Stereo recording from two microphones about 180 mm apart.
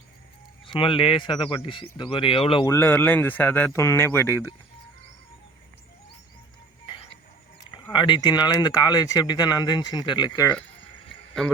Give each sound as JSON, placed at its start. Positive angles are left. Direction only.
{"t": 0.6, "sound": "speech", "side_deg": 30}
{"t": 2.6, "sound": "speech", "side_deg": 15}
{"t": 7.6, "sound": "speech", "side_deg": 25}